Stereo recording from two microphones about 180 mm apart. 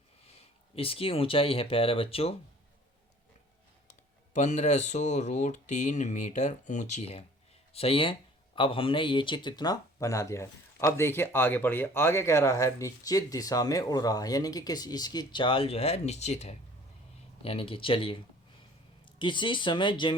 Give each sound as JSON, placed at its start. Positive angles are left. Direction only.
{"t": 0.3, "sound": "speech", "side_deg": 30}
{"t": 4.4, "sound": "speech", "side_deg": 40}
{"t": 19.2, "sound": "speech", "side_deg": 25}